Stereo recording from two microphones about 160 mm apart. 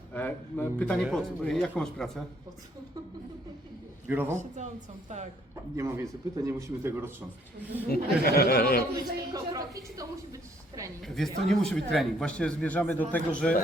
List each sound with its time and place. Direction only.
0.1 s speech: 10° left (ahead or behind)
4.0 s a man's voice: 10° right (ahead or behind)
4.4 s a woman's voice: 50° right (ahead or behind)
5.7 s a man's voice: 20° right (ahead or behind)
7.9 s speech: 70° left (ahead or behind)
9.3 s a woman's voice: 20° right (ahead or behind)
11.0 s speech: centre (ahead or behind)